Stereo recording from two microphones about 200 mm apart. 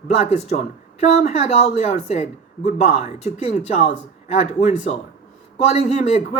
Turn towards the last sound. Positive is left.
turn(degrees=35)  # may be behind; listen again after turning